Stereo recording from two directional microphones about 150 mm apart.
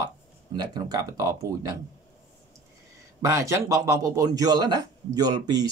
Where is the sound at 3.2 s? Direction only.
20° right (ahead or behind).